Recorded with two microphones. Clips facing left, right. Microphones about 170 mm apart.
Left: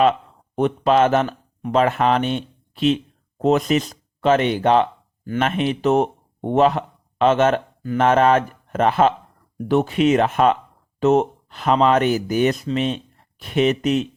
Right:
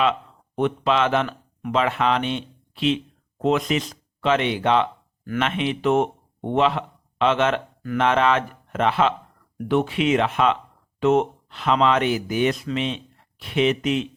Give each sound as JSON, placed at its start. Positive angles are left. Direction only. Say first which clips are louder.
{"t": 0.0, "sound": "speech", "louder": "left 5 dB", "side_deg": 40}